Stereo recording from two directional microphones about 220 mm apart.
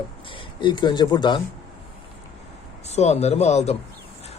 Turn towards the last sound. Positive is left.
turn(degrees=30)  # may be behind; listen again after turning